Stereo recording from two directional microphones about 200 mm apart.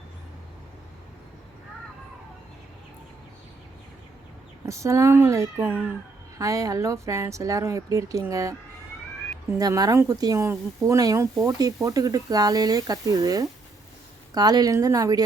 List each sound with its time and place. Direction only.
4.6 s speech: 15° right (ahead or behind)
9.6 s speech: 20° right (ahead or behind)